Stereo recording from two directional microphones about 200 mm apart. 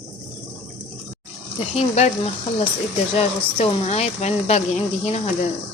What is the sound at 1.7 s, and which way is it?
Speech, 30° left (ahead or behind).